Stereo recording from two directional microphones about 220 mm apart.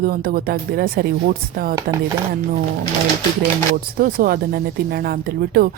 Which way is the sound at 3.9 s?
40° right (ahead or behind).